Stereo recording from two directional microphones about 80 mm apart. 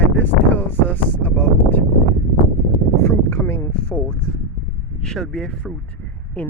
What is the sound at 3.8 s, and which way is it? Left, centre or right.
Speech, centre.